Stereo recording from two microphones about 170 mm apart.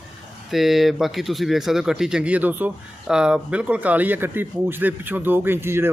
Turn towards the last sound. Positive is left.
turn(degrees=-15)  # may be behind; listen again after turning